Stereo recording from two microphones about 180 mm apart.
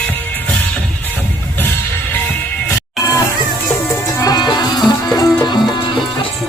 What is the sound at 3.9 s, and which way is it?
Music, 20° left (ahead or behind).